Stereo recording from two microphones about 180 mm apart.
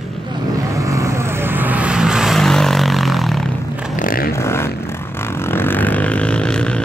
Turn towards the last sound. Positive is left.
turn(degrees=5)  # may be behind; listen again after turning